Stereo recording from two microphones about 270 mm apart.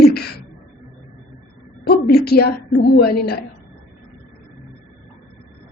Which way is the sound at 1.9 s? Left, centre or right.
Left.